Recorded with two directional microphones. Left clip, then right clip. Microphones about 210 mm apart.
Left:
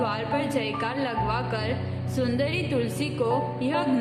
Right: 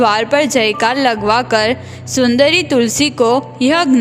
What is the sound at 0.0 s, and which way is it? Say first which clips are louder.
A woman's voice: right 15 dB; 55° right (ahead or behind).